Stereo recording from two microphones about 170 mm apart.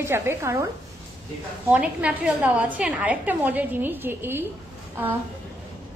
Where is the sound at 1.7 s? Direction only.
10° right (ahead or behind).